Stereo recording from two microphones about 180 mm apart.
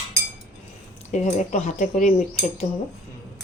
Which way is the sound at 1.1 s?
40° left (ahead or behind).